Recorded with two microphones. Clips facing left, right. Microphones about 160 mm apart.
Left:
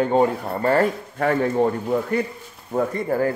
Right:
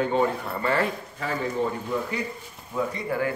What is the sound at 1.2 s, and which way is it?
A man's voice, 60° left (ahead or behind).